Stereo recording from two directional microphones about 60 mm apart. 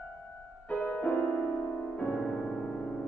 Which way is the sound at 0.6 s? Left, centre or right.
Left.